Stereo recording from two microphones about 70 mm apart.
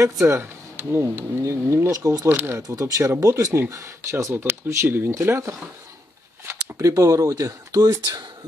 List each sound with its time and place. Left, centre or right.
0.0 s speech: right
0.4 s speech: right
1.9 s speech: right
2.2 s speech: right
2.8 s speech: right
6.8 s speech: right